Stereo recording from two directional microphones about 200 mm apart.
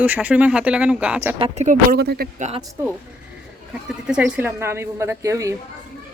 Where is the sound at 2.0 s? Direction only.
50° right (ahead or behind).